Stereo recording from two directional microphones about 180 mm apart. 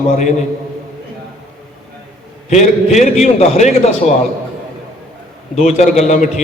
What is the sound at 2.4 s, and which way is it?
A man's voice, 40° left (ahead or behind).